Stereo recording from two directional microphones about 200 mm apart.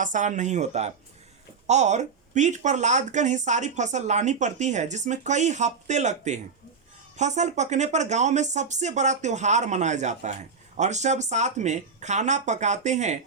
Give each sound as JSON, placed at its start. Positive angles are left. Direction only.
{"t": 0.0, "sound": "speech", "side_deg": -40}